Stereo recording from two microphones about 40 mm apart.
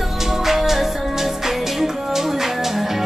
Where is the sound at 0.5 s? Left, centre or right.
Centre.